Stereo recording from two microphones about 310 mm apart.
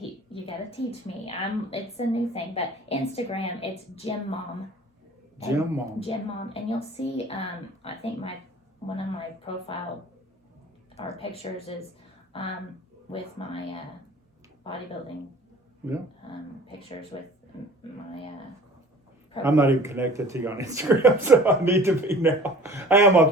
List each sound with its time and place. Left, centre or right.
0.3 s a woman's voice: centre
5.4 s speech: centre
6.0 s a woman's voice: centre
10.9 s a woman's voice: centre
19.4 s speech: centre